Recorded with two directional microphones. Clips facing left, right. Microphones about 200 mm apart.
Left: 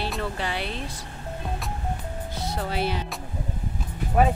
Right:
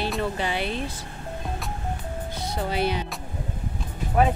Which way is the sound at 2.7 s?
Centre (ahead or behind).